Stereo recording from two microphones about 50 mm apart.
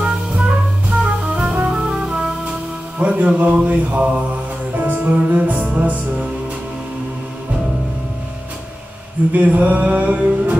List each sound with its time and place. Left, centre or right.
0.0 s music: centre
0.8 s music: right
3.0 s mantra: right
4.7 s music: right
9.3 s mantra: right